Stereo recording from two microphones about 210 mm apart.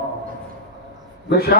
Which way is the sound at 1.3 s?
45° left (ahead or behind).